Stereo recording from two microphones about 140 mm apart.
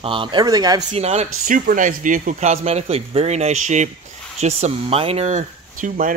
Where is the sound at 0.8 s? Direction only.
50° right (ahead or behind).